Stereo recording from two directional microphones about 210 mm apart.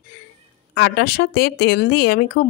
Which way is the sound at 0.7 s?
50° left (ahead or behind).